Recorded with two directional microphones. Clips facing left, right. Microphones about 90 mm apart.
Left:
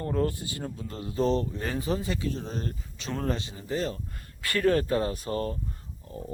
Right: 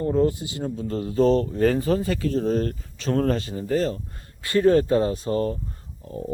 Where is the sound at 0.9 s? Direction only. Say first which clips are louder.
Right 7 dB; 35° right (ahead or behind).